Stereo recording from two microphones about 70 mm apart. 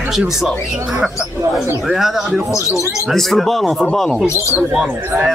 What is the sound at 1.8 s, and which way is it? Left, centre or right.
Speech, centre.